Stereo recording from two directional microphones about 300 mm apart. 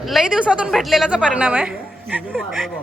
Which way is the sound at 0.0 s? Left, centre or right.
Centre.